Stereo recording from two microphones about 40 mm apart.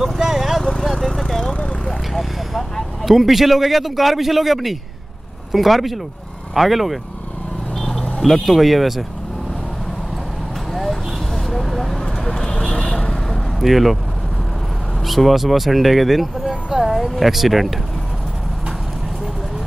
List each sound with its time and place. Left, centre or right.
0.2 s vehicle: centre
0.7 s vehicle: centre
1.4 s a sound: left
3.0 s speech: centre
8.2 s speech: centre
10.7 s vehicle: centre
12.0 s a sound: centre
13.6 s speech: centre
15.0 s speech: centre